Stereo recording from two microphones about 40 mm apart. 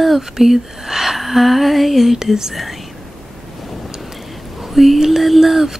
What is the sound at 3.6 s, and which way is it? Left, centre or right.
Waves, centre.